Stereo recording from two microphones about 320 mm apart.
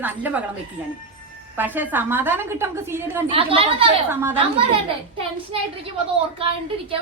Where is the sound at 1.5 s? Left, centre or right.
Centre.